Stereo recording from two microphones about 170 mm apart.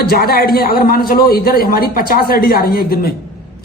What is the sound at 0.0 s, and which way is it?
A woman's voice, 65° left (ahead or behind).